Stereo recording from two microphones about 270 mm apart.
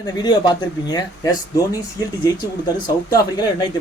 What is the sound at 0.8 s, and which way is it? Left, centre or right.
Speech, centre.